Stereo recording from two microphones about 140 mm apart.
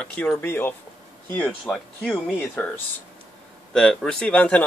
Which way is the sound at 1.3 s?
5° left (ahead or behind).